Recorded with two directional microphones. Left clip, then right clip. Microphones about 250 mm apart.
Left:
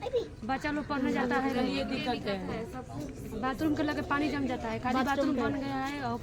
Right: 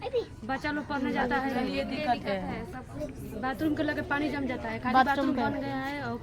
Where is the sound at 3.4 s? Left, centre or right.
Centre.